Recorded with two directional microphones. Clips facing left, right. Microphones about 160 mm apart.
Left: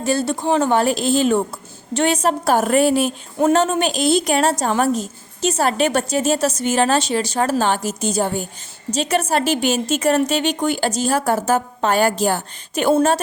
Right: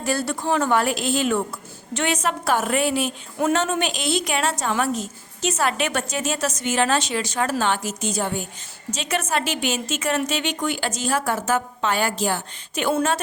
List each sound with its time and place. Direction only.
0.0 s a woman's voice: 25° left (ahead or behind)